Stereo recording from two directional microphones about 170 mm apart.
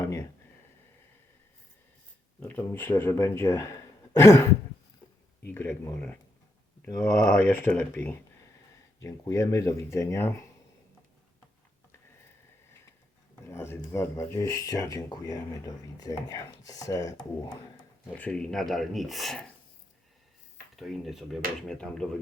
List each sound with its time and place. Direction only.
0.0 s a sound: 20° left (ahead or behind)
2.4 s speech: 10° left (ahead or behind)
5.5 s speech: 15° left (ahead or behind)
13.5 s speech: 15° left (ahead or behind)
18.1 s speech: 5° left (ahead or behind)
20.7 s speech: centre (ahead or behind)